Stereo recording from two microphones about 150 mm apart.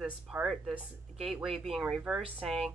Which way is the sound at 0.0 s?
5° right (ahead or behind).